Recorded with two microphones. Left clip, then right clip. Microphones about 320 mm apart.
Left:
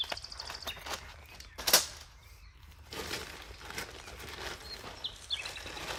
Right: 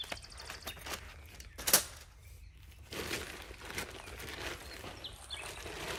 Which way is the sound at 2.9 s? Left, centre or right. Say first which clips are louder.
Even; centre.